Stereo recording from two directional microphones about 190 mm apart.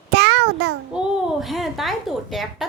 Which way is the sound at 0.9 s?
Centre (ahead or behind).